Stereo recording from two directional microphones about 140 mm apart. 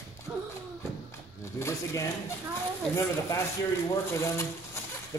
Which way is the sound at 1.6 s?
20° left (ahead or behind).